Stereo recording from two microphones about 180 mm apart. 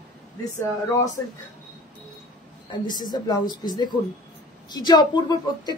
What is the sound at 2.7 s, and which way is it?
Speech, 25° left (ahead or behind).